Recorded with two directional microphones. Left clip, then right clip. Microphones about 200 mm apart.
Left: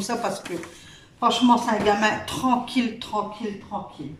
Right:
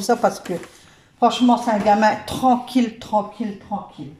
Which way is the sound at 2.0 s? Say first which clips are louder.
Right 5 dB; 25° right (ahead or behind).